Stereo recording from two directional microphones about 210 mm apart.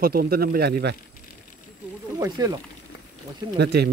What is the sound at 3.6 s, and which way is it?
Speech, 50° right (ahead or behind).